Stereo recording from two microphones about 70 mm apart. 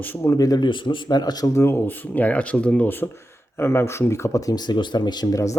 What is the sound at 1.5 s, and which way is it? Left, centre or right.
Speech, left.